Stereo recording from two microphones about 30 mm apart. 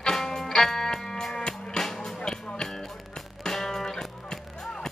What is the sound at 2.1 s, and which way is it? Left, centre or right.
Music, left.